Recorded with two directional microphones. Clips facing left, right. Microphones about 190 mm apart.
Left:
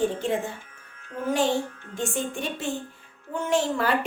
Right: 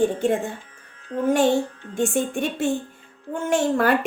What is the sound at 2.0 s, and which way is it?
A woman's voice, 55° right (ahead or behind).